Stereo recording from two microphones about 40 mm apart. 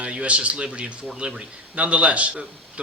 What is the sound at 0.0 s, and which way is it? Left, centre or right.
A man's voice, right.